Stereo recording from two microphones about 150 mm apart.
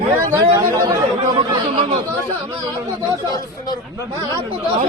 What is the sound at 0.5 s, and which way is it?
Speech, 20° right (ahead or behind).